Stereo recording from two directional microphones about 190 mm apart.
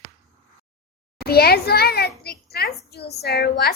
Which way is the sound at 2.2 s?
55° left (ahead or behind).